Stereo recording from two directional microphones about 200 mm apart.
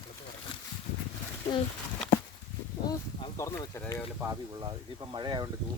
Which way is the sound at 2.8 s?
15° left (ahead or behind).